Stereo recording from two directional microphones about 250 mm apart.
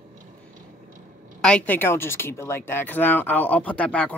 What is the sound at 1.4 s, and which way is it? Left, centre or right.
Speech, centre.